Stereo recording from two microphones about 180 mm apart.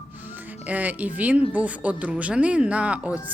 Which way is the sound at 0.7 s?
10° right (ahead or behind).